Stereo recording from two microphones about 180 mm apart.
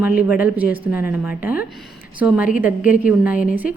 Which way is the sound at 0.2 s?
10° right (ahead or behind).